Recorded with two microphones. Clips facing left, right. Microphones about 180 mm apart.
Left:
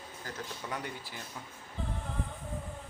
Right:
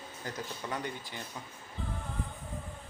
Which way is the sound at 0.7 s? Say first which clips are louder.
Right 3 dB; 5° left (ahead or behind).